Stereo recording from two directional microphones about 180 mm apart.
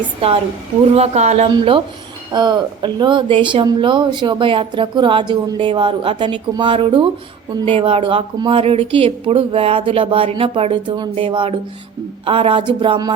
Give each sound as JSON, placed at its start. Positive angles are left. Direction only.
{"t": 0.9, "sound": "a woman's voice", "side_deg": -35}